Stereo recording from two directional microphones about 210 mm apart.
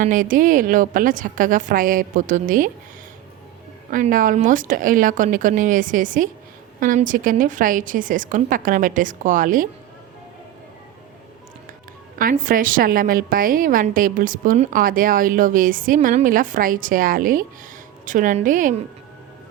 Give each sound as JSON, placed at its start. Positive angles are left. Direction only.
{"t": 0.0, "sound": "a woman's voice", "side_deg": -40}
{"t": 3.9, "sound": "a woman's voice", "side_deg": -40}
{"t": 12.2, "sound": "a woman's voice", "side_deg": -40}